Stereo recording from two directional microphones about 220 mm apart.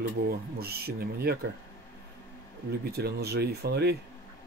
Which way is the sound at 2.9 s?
45° right (ahead or behind).